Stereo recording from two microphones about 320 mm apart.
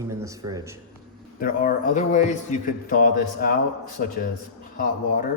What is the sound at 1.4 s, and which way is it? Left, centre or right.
Speech, left.